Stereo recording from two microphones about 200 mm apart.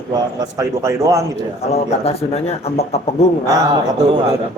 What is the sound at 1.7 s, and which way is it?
Speech, 30° left (ahead or behind).